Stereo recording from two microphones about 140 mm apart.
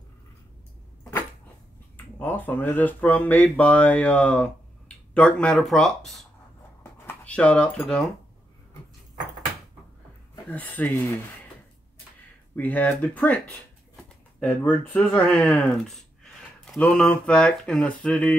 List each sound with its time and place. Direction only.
2.1 s speech: 15° left (ahead or behind)
6.8 s a sound: 10° left (ahead or behind)
10.5 s speech: 10° left (ahead or behind)
12.5 s speech: 10° left (ahead or behind)